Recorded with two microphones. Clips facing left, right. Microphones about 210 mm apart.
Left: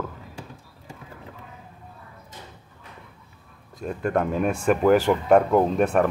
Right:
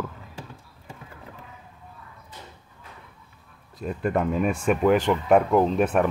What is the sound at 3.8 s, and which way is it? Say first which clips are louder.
Speech: left 1 dB; centre (ahead or behind).